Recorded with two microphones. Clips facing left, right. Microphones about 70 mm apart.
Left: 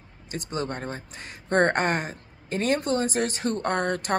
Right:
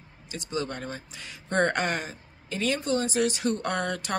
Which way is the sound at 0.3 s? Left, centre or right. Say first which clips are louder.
Left 1 dB; left.